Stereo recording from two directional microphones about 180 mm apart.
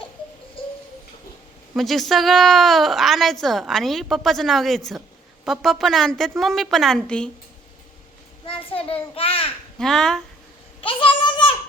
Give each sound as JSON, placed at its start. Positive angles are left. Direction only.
{"t": 1.7, "sound": "a woman's voice", "side_deg": 0}
{"t": 8.4, "sound": "a child's voice", "side_deg": 30}
{"t": 9.7, "sound": "a woman's voice", "side_deg": 0}
{"t": 10.8, "sound": "a sound", "side_deg": 30}